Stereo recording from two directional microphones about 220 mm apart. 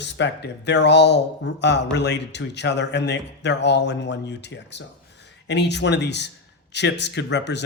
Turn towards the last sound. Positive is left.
turn(degrees=50)  # may be behind; listen again after turning